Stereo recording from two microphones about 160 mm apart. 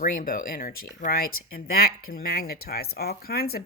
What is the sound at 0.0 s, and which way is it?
Speech, 60° left (ahead or behind).